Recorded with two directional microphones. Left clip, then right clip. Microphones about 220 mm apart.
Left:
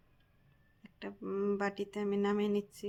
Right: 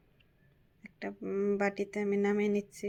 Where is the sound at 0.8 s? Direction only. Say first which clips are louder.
Right 4 dB; 5° right (ahead or behind).